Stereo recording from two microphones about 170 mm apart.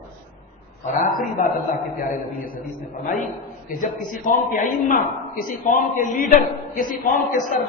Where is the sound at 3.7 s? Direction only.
55° left (ahead or behind).